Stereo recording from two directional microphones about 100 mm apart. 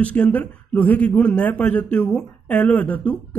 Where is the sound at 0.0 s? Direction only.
15° left (ahead or behind).